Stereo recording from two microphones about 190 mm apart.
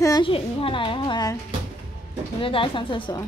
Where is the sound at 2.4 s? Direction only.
25° left (ahead or behind).